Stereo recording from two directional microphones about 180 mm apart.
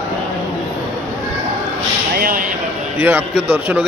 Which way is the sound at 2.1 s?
50° right (ahead or behind).